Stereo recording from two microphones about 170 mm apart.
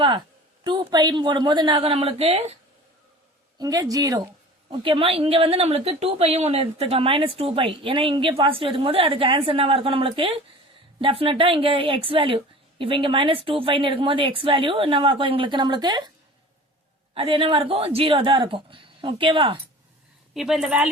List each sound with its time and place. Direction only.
0.6 s a woman's voice: 25° right (ahead or behind)
3.6 s a woman's voice: 20° right (ahead or behind)
17.2 s a woman's voice: 35° right (ahead or behind)
20.3 s a woman's voice: 5° right (ahead or behind)